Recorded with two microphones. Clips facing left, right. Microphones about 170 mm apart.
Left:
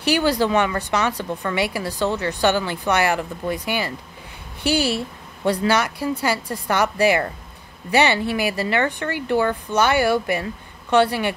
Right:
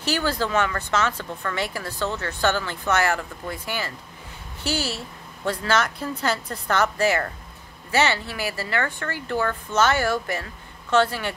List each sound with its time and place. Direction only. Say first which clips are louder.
0.0 s speech: left 6 dB; 15° left (ahead or behind)